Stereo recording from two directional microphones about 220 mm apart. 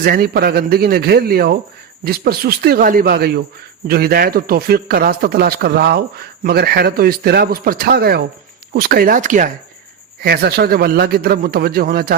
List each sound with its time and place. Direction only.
0.0 s a man's voice: 40° right (ahead or behind)